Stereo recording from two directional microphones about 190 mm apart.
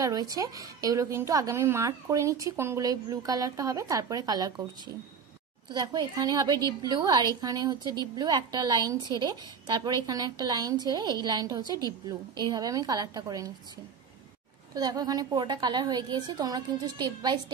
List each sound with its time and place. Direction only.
0.0 s a woman's voice: 20° right (ahead or behind)
14.7 s a woman's voice: 20° right (ahead or behind)